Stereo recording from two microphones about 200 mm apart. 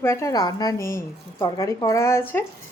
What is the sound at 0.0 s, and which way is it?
A woman's voice, 15° left (ahead or behind).